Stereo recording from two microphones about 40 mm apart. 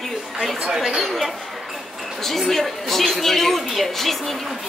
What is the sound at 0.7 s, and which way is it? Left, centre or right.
Speech, centre.